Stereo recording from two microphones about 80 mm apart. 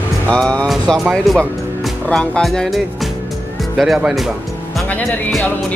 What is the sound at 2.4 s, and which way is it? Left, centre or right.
Music, centre.